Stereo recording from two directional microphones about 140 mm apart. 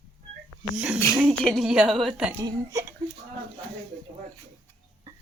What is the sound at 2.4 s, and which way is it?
Speech, 25° right (ahead or behind).